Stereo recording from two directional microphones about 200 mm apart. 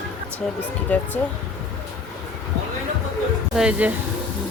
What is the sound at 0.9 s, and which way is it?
Speech, 10° left (ahead or behind).